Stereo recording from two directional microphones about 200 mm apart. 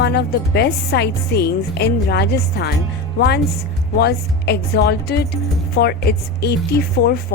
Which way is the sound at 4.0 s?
55° left (ahead or behind).